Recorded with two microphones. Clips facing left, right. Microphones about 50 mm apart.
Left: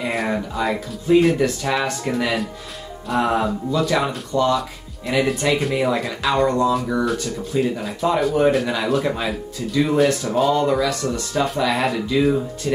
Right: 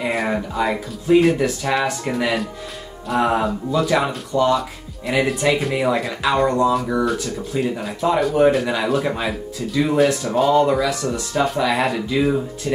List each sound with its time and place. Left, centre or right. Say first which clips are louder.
0.1 s speech: right 1 dB; centre